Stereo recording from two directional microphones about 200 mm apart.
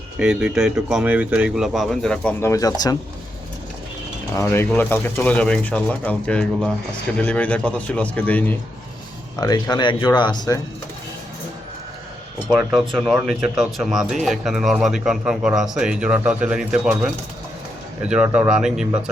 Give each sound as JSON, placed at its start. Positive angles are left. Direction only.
{"t": 0.2, "sound": "speech", "side_deg": -5}
{"t": 4.4, "sound": "speech", "side_deg": 15}
{"t": 9.4, "sound": "speech", "side_deg": 20}
{"t": 13.2, "sound": "speech", "side_deg": 0}